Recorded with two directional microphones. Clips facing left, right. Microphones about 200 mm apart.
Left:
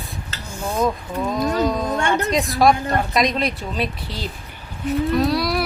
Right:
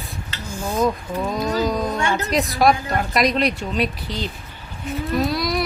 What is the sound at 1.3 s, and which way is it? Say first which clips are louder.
Speech: left 2 dB; centre (ahead or behind).